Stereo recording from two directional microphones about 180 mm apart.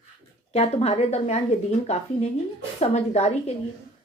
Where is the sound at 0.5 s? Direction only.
35° left (ahead or behind).